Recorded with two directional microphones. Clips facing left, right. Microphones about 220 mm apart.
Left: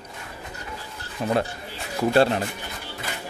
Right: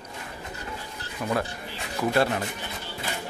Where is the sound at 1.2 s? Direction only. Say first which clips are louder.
Left 4 dB; 30° left (ahead or behind).